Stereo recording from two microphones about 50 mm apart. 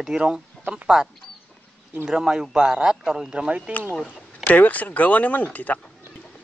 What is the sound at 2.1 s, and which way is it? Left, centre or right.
Speech, centre.